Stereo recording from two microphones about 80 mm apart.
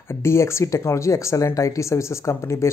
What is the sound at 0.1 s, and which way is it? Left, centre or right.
Speech, left.